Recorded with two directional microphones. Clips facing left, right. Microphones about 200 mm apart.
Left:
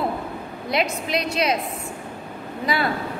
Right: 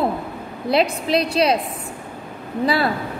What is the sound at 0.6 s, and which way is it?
Speech, 30° right (ahead or behind).